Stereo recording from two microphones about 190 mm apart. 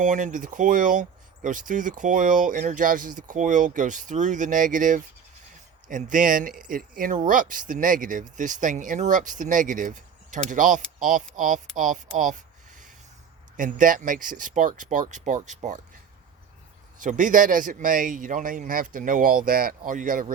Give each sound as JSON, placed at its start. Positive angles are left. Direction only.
{"t": 0.0, "sound": "speech", "side_deg": -40}
{"t": 13.6, "sound": "speech", "side_deg": -45}
{"t": 17.0, "sound": "speech", "side_deg": -45}